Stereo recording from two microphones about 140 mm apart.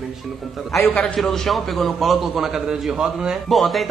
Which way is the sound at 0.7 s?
Centre (ahead or behind).